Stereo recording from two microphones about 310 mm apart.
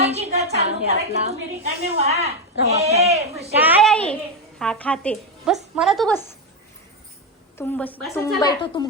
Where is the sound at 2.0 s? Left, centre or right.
Centre.